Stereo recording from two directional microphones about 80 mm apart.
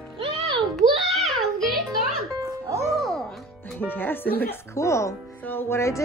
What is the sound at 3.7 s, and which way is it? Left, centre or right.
Speech, left.